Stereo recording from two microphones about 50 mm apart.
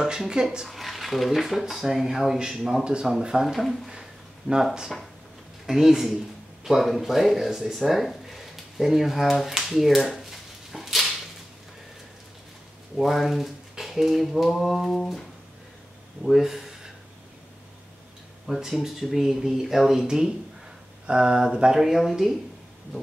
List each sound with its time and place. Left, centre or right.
0.0 s speech: centre
0.7 s a sound: centre
1.4 s speech: centre
2.8 s speech: centre
3.5 s speech: centre
5.7 s speech: centre
8.1 s finger snapping: centre
12.9 s speech: centre
16.3 s a sound: centre
18.6 s speech: centre